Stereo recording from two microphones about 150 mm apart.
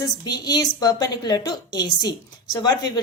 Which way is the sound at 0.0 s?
25° left (ahead or behind).